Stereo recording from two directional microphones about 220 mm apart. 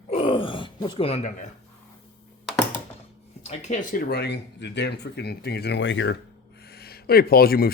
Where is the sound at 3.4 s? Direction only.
35° left (ahead or behind).